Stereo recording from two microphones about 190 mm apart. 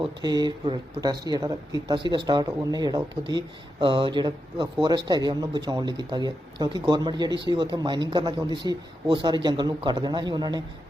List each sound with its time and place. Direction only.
0.0 s speech: 20° right (ahead or behind)